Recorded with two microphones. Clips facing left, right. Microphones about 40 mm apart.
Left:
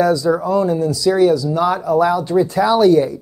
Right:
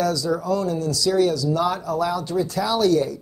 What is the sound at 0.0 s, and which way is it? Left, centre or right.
Speech, left.